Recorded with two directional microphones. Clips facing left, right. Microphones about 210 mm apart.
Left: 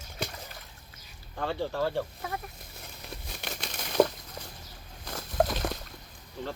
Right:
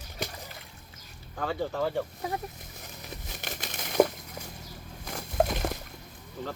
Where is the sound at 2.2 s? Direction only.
20° right (ahead or behind).